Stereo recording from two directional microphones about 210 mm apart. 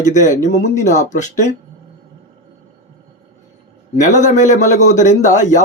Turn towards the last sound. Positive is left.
turn(degrees=35)  # may be behind; listen again after turning